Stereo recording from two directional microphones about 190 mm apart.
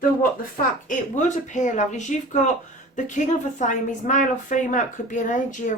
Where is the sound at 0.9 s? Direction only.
40° left (ahead or behind).